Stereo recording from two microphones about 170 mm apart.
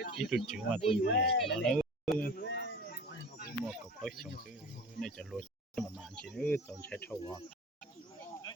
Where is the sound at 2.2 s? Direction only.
60° left (ahead or behind); by 3.4 s 90° left.